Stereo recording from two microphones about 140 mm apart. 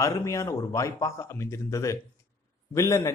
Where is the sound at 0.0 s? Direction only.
20° left (ahead or behind).